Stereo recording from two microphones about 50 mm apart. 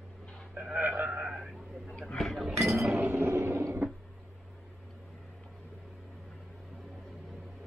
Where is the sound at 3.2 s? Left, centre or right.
Right.